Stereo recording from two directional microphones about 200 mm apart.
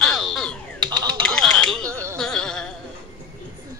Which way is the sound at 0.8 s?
20° right (ahead or behind).